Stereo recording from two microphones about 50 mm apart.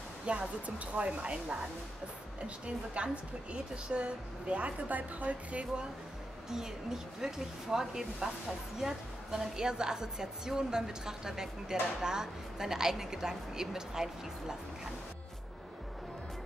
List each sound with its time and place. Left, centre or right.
0.3 s a woman's voice: right
6.5 s a woman's voice: centre